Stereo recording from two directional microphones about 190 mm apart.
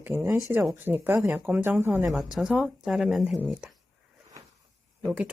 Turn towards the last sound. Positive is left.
turn(degrees=-5)  # may be behind; listen again after turning